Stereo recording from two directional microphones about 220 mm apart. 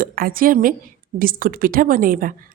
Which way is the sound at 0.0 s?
40° right (ahead or behind).